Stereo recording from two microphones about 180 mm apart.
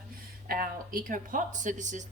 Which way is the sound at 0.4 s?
55° right (ahead or behind).